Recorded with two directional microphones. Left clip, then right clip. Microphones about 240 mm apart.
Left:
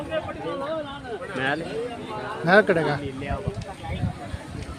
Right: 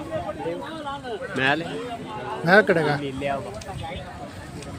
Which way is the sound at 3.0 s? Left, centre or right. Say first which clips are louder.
Right 5 dB; right.